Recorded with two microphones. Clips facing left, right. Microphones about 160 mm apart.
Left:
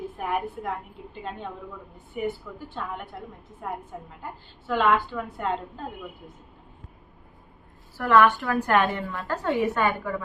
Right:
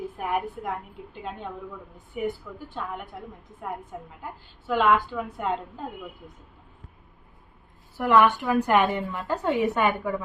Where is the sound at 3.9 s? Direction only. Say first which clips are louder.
Even; 5° right (ahead or behind).